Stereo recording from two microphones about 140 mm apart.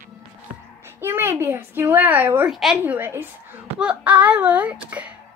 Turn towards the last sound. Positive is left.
turn(degrees=-10)  # may be behind; listen again after turning